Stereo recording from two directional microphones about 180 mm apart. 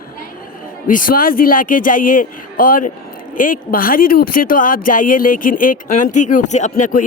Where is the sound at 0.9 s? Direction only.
50° left (ahead or behind).